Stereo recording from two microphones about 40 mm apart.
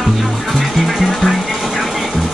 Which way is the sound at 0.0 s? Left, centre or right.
Centre.